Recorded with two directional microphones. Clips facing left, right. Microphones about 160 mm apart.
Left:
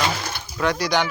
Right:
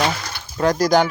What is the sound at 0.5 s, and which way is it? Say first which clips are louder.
Speech: right 6 dB; 40° right (ahead or behind).